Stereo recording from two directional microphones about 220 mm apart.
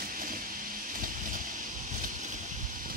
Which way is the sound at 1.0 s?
35° right (ahead or behind).